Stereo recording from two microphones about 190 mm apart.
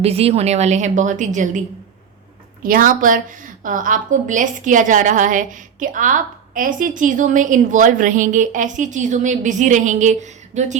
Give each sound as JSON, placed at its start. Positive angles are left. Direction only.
{"t": 0.0, "sound": "a woman's voice", "side_deg": -30}
{"t": 2.6, "sound": "a woman's voice", "side_deg": -45}